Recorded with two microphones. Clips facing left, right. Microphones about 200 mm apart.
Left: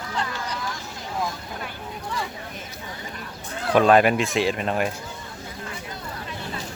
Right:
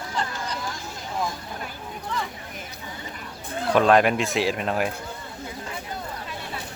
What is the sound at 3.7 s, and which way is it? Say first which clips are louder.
Speech: left 2 dB; 5° left (ahead or behind).